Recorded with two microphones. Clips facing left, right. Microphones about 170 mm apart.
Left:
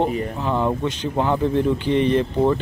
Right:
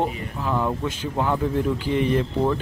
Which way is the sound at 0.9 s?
5° right (ahead or behind).